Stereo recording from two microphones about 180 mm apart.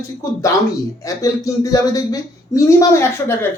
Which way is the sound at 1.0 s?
20° left (ahead or behind).